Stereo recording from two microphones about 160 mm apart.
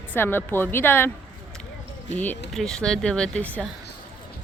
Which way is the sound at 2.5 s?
Centre (ahead or behind).